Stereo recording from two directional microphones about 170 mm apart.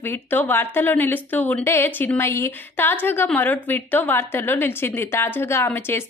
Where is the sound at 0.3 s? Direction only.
10° left (ahead or behind).